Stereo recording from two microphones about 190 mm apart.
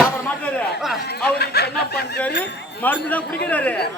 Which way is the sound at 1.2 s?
55° left (ahead or behind).